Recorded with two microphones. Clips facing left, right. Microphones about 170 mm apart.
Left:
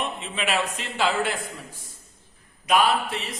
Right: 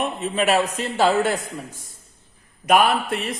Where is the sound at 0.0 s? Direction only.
45° right (ahead or behind).